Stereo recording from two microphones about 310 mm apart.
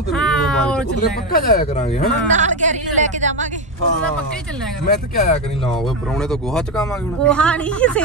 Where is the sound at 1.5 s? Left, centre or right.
Left.